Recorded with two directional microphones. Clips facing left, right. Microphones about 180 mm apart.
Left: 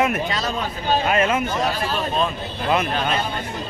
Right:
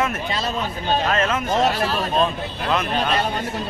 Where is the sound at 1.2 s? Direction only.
10° left (ahead or behind).